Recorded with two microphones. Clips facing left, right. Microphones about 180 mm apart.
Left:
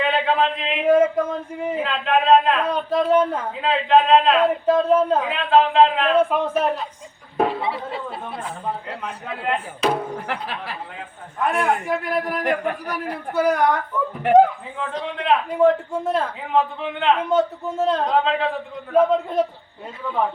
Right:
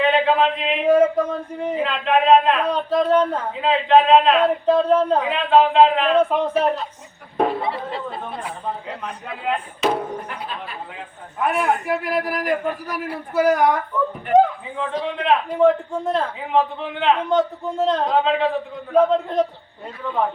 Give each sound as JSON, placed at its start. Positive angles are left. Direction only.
{"t": 0.0, "sound": "a sound", "side_deg": 0}
{"t": 1.5, "sound": "a man's voice", "side_deg": 5}
{"t": 7.7, "sound": "a man's voice", "side_deg": 5}
{"t": 11.3, "sound": "a man's voice", "side_deg": 0}
{"t": 14.3, "sound": "a man's voice", "side_deg": 90}
{"t": 14.8, "sound": "a man's voice", "side_deg": 0}